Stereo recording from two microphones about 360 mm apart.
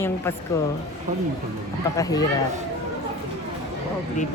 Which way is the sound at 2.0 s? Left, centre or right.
Centre.